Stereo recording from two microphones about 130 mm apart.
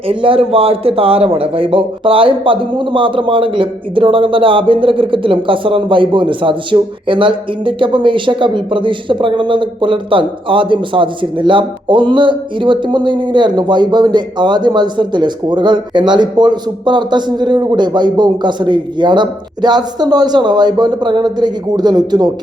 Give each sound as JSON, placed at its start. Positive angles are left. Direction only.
{"t": 0.1, "sound": "a man's voice", "side_deg": -45}